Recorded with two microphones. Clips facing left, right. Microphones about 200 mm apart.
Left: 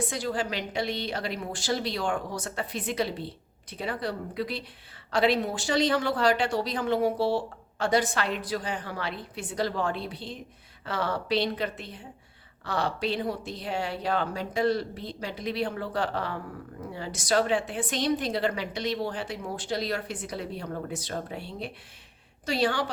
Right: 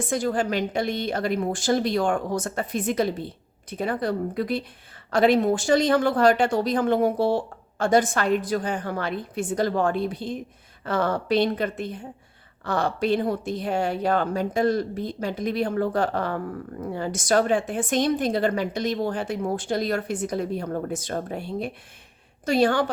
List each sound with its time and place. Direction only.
0.1 s speech: 50° right (ahead or behind)